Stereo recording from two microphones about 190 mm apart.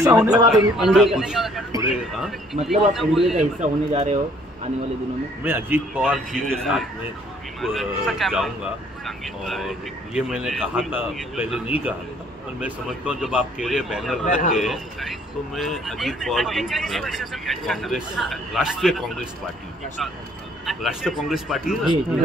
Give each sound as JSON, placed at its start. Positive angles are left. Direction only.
{"t": 0.0, "sound": "speech", "side_deg": -10}
{"t": 1.7, "sound": "speech", "side_deg": -20}
{"t": 2.1, "sound": "speech", "side_deg": 0}
{"t": 3.9, "sound": "speech", "side_deg": -35}
{"t": 5.4, "sound": "speech", "side_deg": -10}
{"t": 6.0, "sound": "speech", "side_deg": 5}
{"t": 14.2, "sound": "a man's voice", "side_deg": 40}
{"t": 14.6, "sound": "speech", "side_deg": 0}
{"t": 20.6, "sound": "speech", "side_deg": 0}